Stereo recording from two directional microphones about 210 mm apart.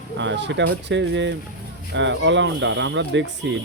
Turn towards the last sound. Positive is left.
turn(degrees=-60)  # may be behind; listen again after turning